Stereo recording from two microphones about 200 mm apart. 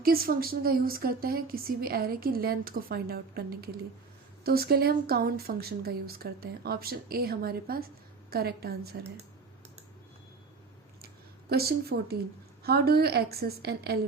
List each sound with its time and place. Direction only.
0.0 s speech: 45° right (ahead or behind)
11.0 s a sound: 50° right (ahead or behind)
12.6 s speech: 50° right (ahead or behind)